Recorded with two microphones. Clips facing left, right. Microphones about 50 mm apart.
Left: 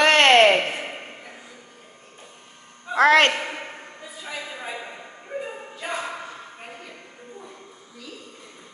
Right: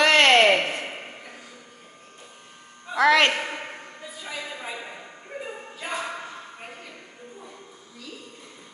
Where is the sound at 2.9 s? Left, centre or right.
Left.